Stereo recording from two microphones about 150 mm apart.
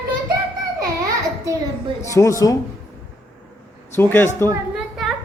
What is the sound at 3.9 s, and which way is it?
Speech, 15° left (ahead or behind).